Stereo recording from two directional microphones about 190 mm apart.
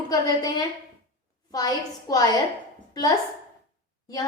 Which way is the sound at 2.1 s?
20° left (ahead or behind).